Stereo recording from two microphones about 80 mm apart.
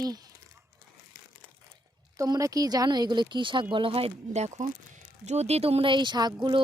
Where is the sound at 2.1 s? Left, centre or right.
Right.